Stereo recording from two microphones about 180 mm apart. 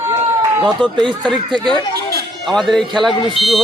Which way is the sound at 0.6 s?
25° right (ahead or behind).